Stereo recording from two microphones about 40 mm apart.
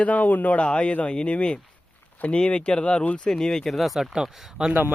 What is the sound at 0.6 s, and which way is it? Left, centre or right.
Speech, left.